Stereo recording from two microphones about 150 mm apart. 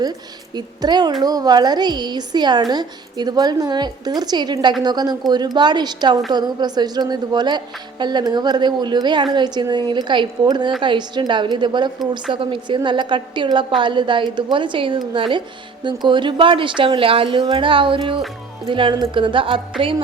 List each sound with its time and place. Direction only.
0.5 s a woman's voice: 30° right (ahead or behind)